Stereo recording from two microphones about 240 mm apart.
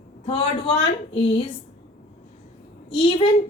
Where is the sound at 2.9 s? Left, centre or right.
Left.